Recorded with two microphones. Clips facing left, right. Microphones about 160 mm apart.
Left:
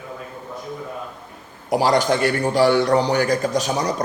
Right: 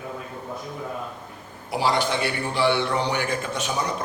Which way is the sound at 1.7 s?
45° left (ahead or behind).